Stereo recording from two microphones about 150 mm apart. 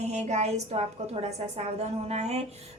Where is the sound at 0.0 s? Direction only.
50° right (ahead or behind).